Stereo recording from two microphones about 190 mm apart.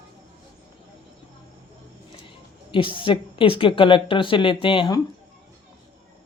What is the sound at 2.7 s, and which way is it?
A woman's voice, 25° left (ahead or behind).